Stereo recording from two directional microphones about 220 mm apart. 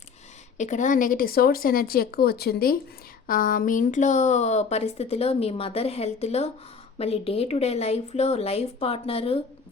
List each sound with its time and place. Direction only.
0.5 s speech: 35° left (ahead or behind)